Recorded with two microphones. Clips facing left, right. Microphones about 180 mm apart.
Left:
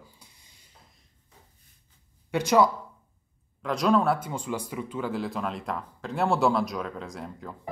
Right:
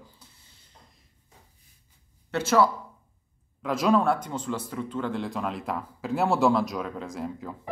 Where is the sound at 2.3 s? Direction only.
15° left (ahead or behind).